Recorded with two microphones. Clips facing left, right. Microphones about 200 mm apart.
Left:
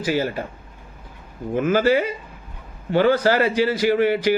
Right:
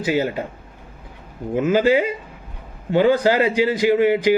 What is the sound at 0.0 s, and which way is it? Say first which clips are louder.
Speech: right 2 dB; 20° right (ahead or behind).